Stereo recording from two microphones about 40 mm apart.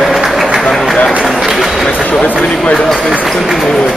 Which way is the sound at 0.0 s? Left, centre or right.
Centre.